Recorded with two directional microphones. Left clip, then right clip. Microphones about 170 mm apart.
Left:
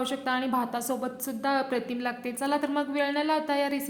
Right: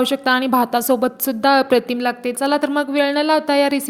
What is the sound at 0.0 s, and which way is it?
A woman's voice, 45° right (ahead or behind).